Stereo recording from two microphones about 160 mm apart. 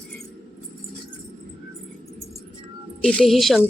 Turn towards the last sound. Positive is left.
turn(degrees=0)  # may be behind; listen again after turning